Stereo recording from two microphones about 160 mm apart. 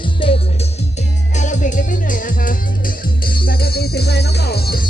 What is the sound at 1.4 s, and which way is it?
Music, 50° left (ahead or behind).